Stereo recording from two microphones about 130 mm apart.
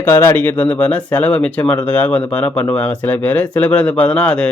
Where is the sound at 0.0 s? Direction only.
20° left (ahead or behind).